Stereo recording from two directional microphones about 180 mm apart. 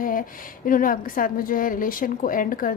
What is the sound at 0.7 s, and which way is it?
A woman's voice, 50° left (ahead or behind).